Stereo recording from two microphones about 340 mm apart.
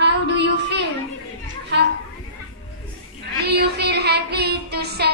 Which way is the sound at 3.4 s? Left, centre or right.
Right.